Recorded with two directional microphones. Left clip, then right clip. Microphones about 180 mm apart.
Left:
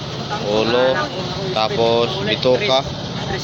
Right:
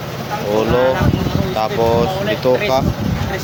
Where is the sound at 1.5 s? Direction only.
15° right (ahead or behind).